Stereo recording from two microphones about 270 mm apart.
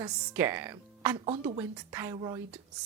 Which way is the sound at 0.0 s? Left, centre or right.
Centre.